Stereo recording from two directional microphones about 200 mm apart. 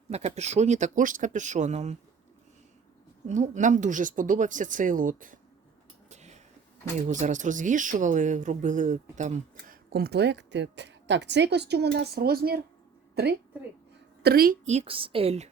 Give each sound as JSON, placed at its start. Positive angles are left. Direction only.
{"t": 0.1, "sound": "speech", "side_deg": -35}
{"t": 3.2, "sound": "speech", "side_deg": -35}
{"t": 6.1, "sound": "a sound", "side_deg": -35}
{"t": 7.1, "sound": "speech", "side_deg": -40}